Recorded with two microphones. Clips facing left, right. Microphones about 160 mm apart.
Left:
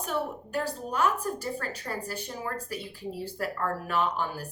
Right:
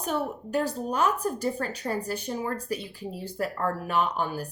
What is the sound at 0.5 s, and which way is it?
A woman's voice, 20° right (ahead or behind).